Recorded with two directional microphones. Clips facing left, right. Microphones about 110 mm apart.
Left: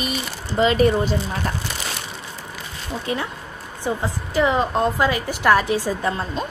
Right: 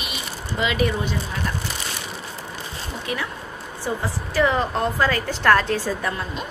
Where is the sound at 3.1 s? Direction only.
30° left (ahead or behind).